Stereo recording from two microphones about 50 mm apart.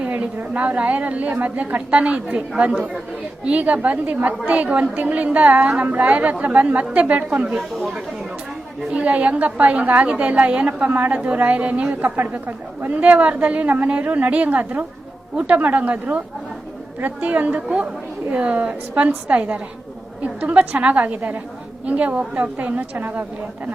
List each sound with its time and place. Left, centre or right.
0.0 s a woman's voice: right
3.4 s a woman's voice: right
8.9 s a woman's voice: right
12.9 s a woman's voice: right